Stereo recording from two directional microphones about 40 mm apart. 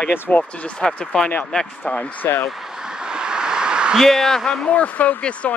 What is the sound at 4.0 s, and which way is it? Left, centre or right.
Speech, centre.